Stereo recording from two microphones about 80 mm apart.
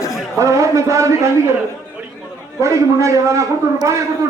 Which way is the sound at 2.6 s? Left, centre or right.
Right.